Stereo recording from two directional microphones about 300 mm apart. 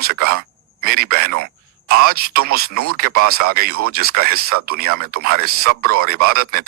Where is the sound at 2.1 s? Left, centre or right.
Right.